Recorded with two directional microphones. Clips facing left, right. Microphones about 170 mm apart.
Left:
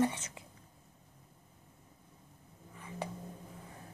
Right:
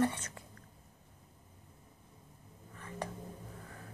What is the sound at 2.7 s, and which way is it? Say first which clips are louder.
Whispering: even; 10° left (ahead or behind).